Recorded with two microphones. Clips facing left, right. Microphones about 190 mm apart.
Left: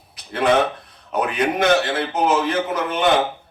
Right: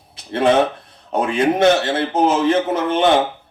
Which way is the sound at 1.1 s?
30° right (ahead or behind).